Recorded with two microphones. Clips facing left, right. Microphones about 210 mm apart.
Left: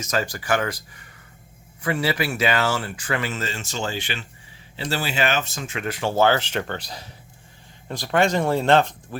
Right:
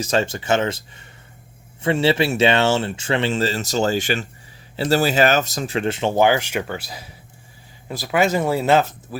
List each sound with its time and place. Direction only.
0.0 s speech: 30° right (ahead or behind); by 9.0 s 5° right (ahead or behind)